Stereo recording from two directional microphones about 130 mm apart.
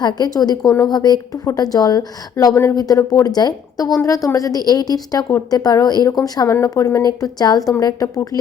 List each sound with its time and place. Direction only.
0.0 s a woman's voice: 30° left (ahead or behind)